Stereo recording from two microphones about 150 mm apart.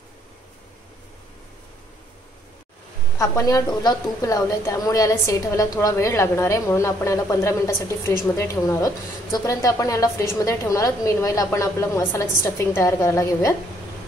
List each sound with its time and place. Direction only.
3.2 s a woman's voice: 20° left (ahead or behind)